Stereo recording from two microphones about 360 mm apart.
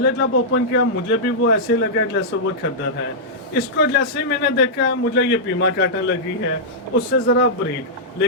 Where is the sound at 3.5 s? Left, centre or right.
Left.